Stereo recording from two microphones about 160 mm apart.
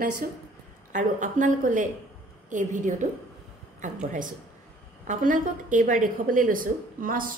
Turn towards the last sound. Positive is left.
turn(degrees=-60)  # may be behind; listen again after turning